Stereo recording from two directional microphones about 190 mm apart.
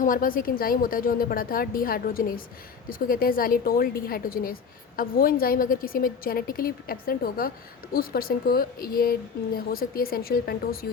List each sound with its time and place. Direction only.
0.0 s a woman's voice: 45° left (ahead or behind)